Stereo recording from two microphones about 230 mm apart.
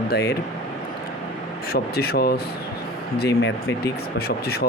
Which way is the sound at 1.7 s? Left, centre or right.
Left.